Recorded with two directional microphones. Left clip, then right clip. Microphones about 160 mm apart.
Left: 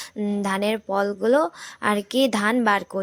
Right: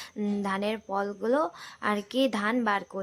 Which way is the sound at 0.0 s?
20° left (ahead or behind).